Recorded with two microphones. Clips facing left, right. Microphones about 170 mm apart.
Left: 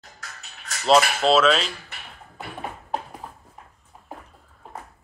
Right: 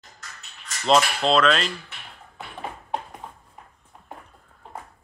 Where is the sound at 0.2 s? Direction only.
65° left (ahead or behind).